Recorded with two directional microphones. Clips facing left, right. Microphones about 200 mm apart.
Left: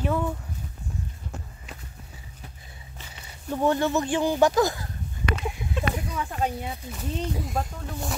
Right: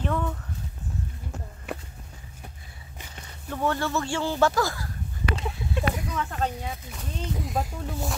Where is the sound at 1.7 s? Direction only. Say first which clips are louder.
Right 11 dB; 60° right (ahead or behind).